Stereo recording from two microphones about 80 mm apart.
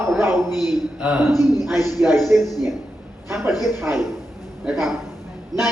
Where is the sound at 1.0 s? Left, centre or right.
Centre.